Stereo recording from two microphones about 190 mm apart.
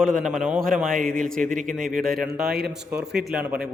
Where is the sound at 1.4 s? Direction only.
45° right (ahead or behind).